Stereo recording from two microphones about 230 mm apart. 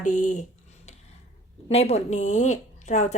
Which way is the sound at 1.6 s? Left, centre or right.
Left.